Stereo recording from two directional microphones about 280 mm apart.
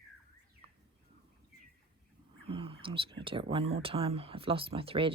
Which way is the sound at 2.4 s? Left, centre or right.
Centre.